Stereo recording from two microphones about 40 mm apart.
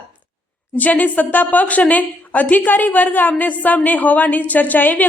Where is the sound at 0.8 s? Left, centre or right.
Left.